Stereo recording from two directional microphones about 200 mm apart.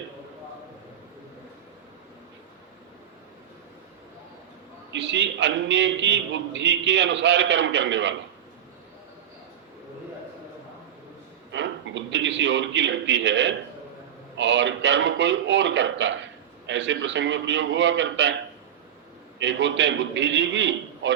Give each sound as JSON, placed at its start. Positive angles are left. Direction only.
{"t": 4.9, "sound": "a man's voice", "side_deg": -65}
{"t": 11.5, "sound": "a sound", "side_deg": -65}
{"t": 14.3, "sound": "a man's voice", "side_deg": -65}
{"t": 19.4, "sound": "a man's voice", "side_deg": -65}